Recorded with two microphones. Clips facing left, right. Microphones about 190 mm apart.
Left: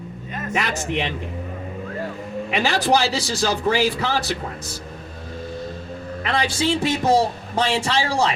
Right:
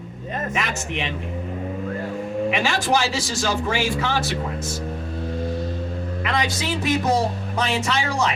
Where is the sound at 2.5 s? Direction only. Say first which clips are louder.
Left 5 dB; 35° left (ahead or behind).